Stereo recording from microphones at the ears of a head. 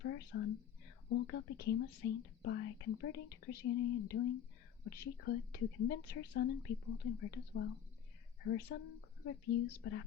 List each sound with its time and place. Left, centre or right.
0.0 s speech: left